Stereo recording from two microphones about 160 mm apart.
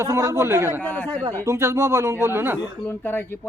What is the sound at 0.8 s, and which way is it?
Speech, 10° left (ahead or behind).